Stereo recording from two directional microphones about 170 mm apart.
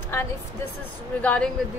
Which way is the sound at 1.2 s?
5° left (ahead or behind).